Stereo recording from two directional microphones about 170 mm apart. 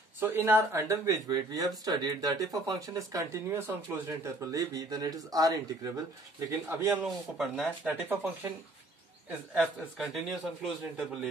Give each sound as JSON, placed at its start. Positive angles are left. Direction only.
{"t": 0.2, "sound": "speech", "side_deg": -10}
{"t": 7.0, "sound": "speech", "side_deg": 0}
{"t": 9.5, "sound": "a man's voice", "side_deg": 0}